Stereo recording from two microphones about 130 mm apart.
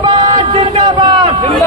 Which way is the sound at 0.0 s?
35° right (ahead or behind).